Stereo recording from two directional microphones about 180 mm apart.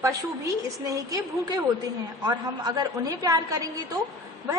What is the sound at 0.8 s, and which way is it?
A woman's voice, 20° right (ahead or behind).